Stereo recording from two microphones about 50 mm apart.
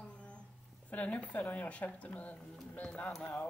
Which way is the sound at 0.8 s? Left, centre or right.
Left.